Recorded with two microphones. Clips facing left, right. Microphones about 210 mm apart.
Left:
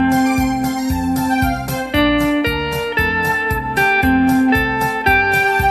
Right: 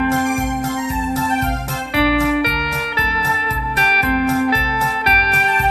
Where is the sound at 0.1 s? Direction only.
40° left (ahead or behind).